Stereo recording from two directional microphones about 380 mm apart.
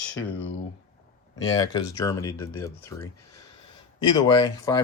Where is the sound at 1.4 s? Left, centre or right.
Centre.